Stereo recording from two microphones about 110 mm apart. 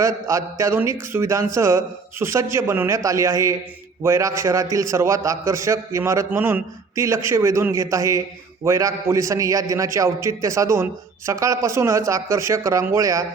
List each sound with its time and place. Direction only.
0.0 s a man's voice: 30° right (ahead or behind)